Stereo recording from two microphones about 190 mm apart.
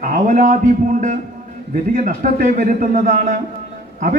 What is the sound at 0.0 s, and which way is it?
Speech, 45° right (ahead or behind).